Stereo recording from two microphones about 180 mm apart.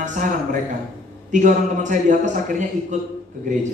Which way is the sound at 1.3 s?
45° right (ahead or behind).